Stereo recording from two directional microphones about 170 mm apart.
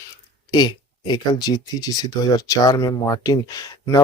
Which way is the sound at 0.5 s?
25° left (ahead or behind).